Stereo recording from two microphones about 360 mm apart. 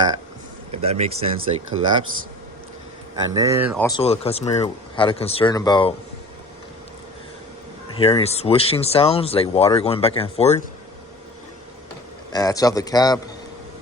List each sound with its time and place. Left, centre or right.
0.7 s speech: centre
1.7 s speech: right
3.3 s speech: centre
3.8 s speech: centre
7.9 s speech: centre
12.3 s speech: centre